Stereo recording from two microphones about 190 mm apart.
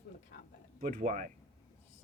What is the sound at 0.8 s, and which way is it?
Speech, 45° right (ahead or behind).